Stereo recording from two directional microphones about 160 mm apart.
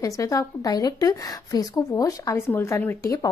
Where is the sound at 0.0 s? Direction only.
20° left (ahead or behind).